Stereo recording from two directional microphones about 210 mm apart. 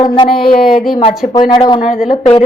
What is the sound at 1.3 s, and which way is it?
Speech, 20° left (ahead or behind).